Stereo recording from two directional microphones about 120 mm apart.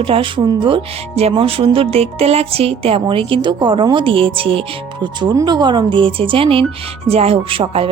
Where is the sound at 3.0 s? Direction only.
45° right (ahead or behind).